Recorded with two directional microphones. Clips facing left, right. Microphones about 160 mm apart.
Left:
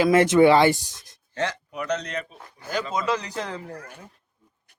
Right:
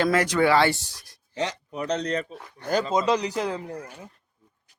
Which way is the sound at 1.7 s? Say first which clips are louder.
Right 2 dB; 30° right (ahead or behind).